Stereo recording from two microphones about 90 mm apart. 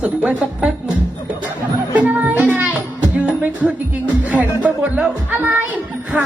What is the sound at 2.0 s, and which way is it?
Music, 15° right (ahead or behind).